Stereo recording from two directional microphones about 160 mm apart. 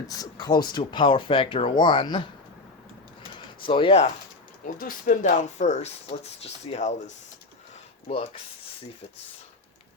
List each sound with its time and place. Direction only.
0.1 s speech: 25° left (ahead or behind)
3.7 s speech: 35° left (ahead or behind)
4.6 s speech: 60° left (ahead or behind); by 6.9 s 40° left (ahead or behind)